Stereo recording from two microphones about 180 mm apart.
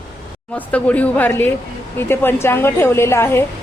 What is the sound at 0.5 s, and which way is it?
A woman's voice, 10° left (ahead or behind).